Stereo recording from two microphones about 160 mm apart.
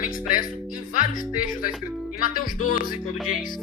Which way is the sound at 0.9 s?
60° left (ahead or behind).